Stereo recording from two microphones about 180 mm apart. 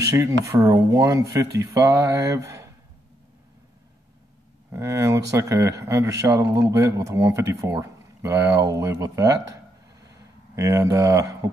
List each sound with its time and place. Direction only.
0.0 s speech: 15° right (ahead or behind)
4.6 s speech: 15° right (ahead or behind)
10.0 s a sound: 15° right (ahead or behind)